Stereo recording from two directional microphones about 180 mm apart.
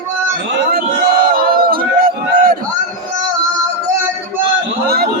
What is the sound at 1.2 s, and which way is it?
Crowd, 55° right (ahead or behind).